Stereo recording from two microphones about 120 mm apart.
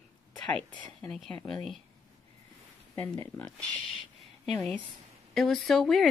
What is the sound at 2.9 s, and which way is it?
Speech, 25° left (ahead or behind).